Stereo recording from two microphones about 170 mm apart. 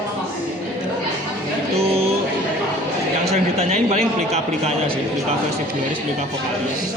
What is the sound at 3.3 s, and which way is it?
A man's voice, 40° right (ahead or behind).